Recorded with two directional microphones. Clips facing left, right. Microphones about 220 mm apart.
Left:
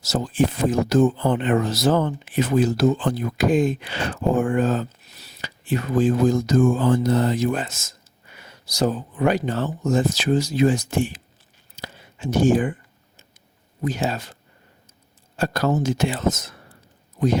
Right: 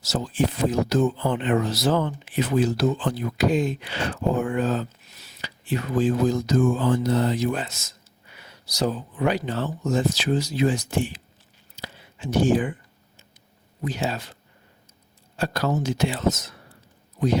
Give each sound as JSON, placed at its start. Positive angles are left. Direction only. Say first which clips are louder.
{"t": 0.0, "sound": "speech", "louder": "left 3 dB", "side_deg": 45}
{"t": 11.8, "sound": "whispering", "louder": "left 3 dB", "side_deg": 45}
{"t": 13.8, "sound": "speech", "louder": "left 3 dB", "side_deg": 45}
{"t": 15.4, "sound": "speech", "louder": "left 3 dB", "side_deg": 50}